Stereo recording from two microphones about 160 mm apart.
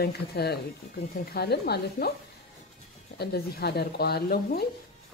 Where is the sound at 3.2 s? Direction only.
75° left (ahead or behind).